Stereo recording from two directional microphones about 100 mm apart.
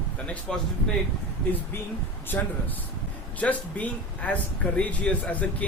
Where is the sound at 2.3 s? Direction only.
20° left (ahead or behind).